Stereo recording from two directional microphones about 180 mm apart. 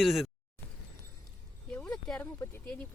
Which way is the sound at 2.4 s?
10° left (ahead or behind).